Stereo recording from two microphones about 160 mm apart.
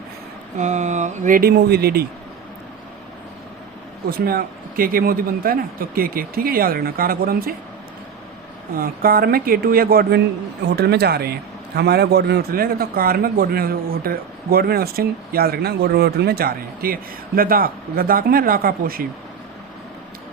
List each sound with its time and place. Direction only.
0.5 s speech: 50° right (ahead or behind); by 2.0 s 75° right (ahead or behind)
4.1 s speech: 70° right (ahead or behind)
8.7 s a man's voice: 65° right (ahead or behind)
10.8 s a man's voice: 90° right; by 19.0 s 65° right (ahead or behind)